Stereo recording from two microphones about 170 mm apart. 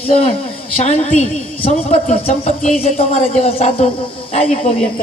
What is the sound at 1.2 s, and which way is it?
Speech, 40° left (ahead or behind).